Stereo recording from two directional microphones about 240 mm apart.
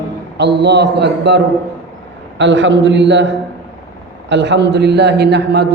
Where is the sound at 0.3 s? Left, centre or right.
Right.